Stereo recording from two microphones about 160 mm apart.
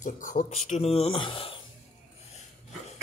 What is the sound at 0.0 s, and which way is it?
Speech, 55° left (ahead or behind).